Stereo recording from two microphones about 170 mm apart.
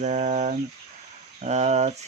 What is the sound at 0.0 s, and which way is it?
Speech, 45° right (ahead or behind).